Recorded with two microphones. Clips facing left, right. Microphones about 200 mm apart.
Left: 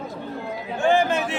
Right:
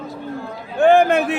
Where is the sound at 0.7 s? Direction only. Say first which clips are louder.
Right 7 dB; 60° right (ahead or behind).